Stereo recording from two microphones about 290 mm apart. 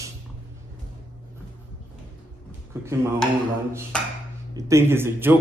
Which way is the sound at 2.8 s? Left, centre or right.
Centre.